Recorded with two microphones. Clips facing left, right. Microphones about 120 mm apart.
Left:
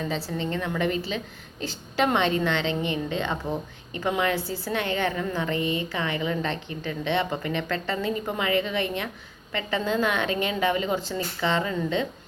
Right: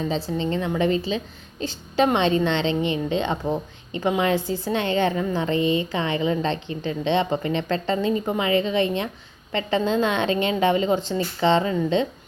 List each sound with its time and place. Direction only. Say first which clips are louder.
0.1 s a woman's voice: right 4 dB; 20° right (ahead or behind)